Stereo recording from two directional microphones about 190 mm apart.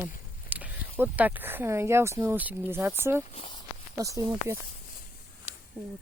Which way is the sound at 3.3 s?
30° left (ahead or behind).